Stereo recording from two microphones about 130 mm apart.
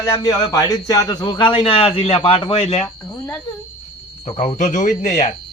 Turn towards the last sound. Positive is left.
turn(degrees=70)  # may be behind; listen again after turning